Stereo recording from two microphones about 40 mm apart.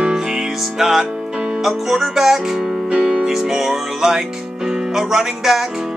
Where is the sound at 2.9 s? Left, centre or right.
Right.